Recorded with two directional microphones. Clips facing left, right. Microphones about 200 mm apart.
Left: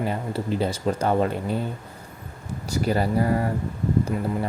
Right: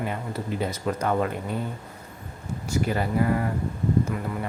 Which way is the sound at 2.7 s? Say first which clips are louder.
Left 3 dB; 35° left (ahead or behind).